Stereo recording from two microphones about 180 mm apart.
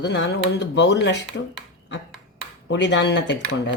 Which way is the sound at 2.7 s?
75° left (ahead or behind).